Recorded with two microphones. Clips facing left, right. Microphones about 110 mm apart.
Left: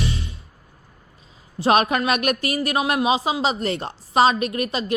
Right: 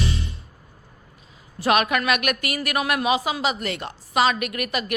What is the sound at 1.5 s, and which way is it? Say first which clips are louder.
Speech: left 2 dB; 30° left (ahead or behind).